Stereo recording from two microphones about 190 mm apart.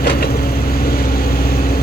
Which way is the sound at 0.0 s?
55° left (ahead or behind).